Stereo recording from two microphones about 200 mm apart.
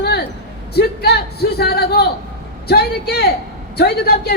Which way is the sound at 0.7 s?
55° left (ahead or behind).